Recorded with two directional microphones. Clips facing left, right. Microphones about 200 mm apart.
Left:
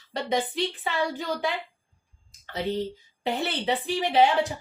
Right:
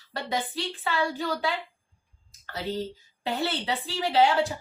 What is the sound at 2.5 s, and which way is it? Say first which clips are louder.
A woman's voice: left 3 dB; 20° left (ahead or behind).